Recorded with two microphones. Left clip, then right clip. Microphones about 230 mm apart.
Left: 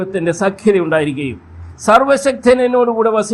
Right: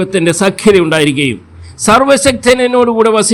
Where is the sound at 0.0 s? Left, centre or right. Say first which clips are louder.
Right 5 dB; right.